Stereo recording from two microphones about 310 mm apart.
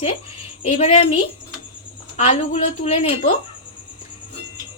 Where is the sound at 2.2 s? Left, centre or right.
Centre.